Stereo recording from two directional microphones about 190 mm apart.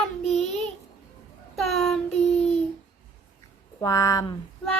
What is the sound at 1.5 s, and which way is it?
Child singing, centre (ahead or behind).